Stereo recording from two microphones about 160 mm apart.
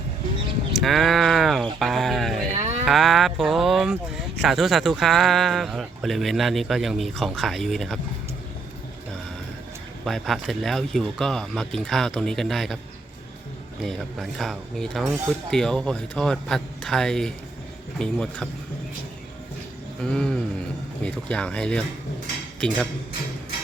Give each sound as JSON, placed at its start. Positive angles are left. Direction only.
{"t": 0.8, "sound": "sheep", "side_deg": 0}
{"t": 1.8, "sound": "a sound", "side_deg": 0}
{"t": 2.5, "sound": "moo", "side_deg": -45}
{"t": 2.8, "sound": "speech", "side_deg": 0}
{"t": 10.0, "sound": "speech", "side_deg": 0}
{"t": 13.8, "sound": "speech", "side_deg": 0}
{"t": 20.0, "sound": "speech", "side_deg": 5}